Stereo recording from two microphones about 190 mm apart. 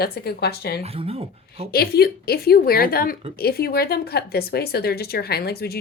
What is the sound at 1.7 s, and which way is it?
A woman's voice, 55° left (ahead or behind).